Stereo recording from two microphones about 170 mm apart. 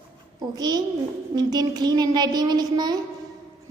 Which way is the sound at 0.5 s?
25° right (ahead or behind).